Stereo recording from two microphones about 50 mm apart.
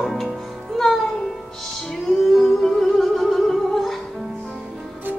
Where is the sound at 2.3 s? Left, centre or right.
Centre.